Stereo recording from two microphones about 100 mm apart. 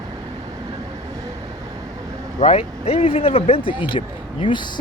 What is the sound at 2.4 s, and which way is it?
Speech, 90° left.